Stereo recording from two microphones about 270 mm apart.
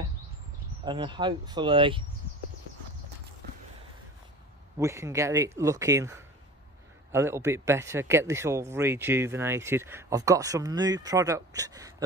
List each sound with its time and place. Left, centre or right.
0.8 s speech: centre
4.7 s speech: centre